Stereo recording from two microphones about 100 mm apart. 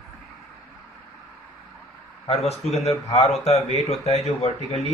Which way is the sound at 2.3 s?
90° left.